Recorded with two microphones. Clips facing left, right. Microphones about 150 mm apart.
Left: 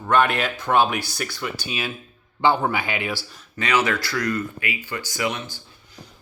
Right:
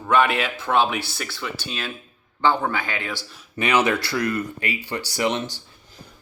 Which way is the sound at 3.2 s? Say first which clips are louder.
Right 4 dB; 20° right (ahead or behind).